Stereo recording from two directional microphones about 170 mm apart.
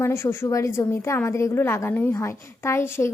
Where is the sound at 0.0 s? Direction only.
15° left (ahead or behind).